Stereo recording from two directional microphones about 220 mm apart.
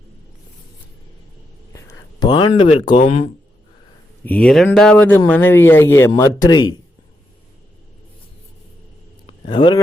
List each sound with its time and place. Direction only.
1.7 s speech: 15° left (ahead or behind); by 3.2 s 30° left (ahead or behind)
4.3 s speech: 5° left (ahead or behind)
9.2 s a sound: 20° left (ahead or behind)